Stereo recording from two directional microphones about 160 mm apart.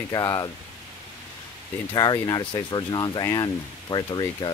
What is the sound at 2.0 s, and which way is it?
Speech, 25° left (ahead or behind).